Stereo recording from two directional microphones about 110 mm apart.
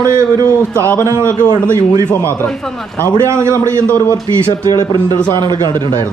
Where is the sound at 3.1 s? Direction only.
25° right (ahead or behind).